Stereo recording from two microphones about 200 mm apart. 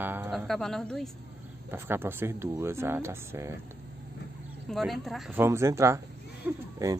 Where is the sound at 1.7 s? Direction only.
10° right (ahead or behind).